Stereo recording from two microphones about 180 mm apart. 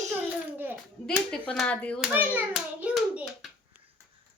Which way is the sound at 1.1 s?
5° left (ahead or behind).